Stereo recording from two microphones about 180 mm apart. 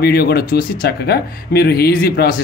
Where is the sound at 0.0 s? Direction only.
60° left (ahead or behind).